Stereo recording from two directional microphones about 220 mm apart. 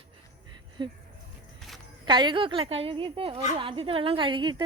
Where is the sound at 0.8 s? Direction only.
20° right (ahead or behind).